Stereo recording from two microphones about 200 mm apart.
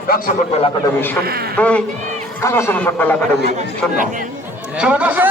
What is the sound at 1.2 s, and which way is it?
Speech, 50° right (ahead or behind).